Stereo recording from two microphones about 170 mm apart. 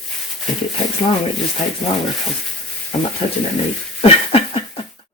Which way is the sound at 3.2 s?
35° left (ahead or behind).